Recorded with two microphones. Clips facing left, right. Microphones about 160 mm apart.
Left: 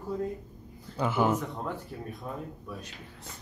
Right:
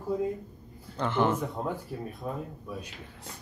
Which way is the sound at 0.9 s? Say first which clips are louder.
Even; 10° left (ahead or behind).